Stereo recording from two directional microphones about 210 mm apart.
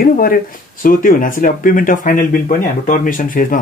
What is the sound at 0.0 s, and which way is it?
Speech, 45° left (ahead or behind).